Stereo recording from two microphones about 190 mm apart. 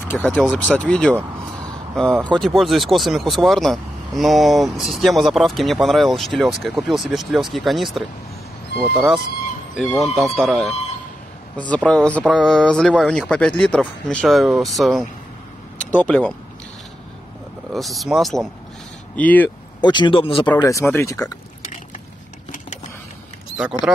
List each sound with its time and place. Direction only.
0.0 s speech: 10° left (ahead or behind)
11.7 s speech: 5° left (ahead or behind)
17.7 s speech: centre (ahead or behind)
19.8 s speech: 25° left (ahead or behind)
20.5 s speech: 15° left (ahead or behind)